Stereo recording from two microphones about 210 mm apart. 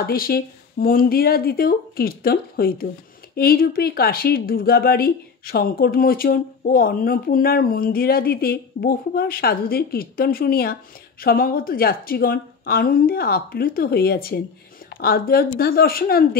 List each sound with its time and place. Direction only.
0.0 s speech: 45° left (ahead or behind)